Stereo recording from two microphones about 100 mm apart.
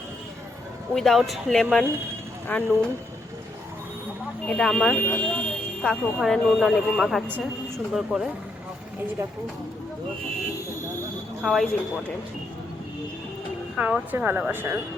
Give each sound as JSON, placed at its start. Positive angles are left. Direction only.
{"t": 0.9, "sound": "speech", "side_deg": 5}
{"t": 2.5, "sound": "speech", "side_deg": 15}
{"t": 4.4, "sound": "speech", "side_deg": 10}
{"t": 11.4, "sound": "speech", "side_deg": 0}
{"t": 13.7, "sound": "speech", "side_deg": -15}